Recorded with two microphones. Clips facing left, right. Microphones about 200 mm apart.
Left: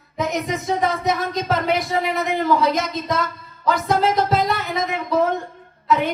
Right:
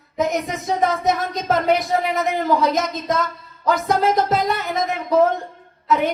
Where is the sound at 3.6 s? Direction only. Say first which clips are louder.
Even; 45° right (ahead or behind).